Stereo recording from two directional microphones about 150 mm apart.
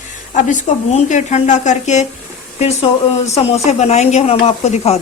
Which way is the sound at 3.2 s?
45° left (ahead or behind).